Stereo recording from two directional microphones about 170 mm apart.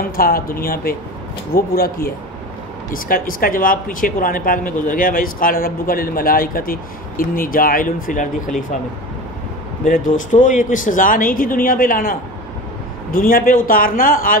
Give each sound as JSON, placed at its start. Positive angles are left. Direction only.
{"t": 0.1, "sound": "speech", "side_deg": 60}
{"t": 9.8, "sound": "speech", "side_deg": 50}